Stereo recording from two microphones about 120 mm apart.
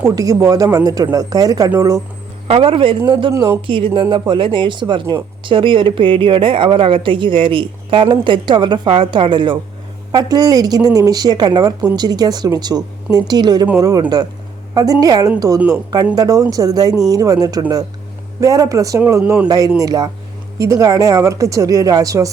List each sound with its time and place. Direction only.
0.2 s a woman's voice: 30° right (ahead or behind)
2.5 s a woman's voice: 50° right (ahead or behind); by 22.3 s 30° right (ahead or behind)